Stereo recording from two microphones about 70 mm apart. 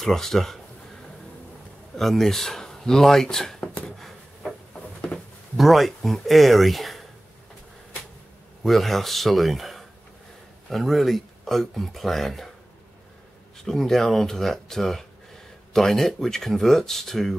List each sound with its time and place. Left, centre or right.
0.0 s speech: centre
2.0 s speech: centre
4.7 s a sound: centre
5.6 s speech: centre
8.6 s speech: centre
13.7 s speech: centre